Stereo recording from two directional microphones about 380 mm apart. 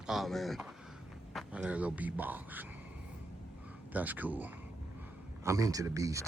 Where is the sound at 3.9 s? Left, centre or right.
Centre.